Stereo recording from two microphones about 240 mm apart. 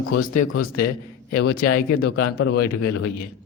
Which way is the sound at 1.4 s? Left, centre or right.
Left.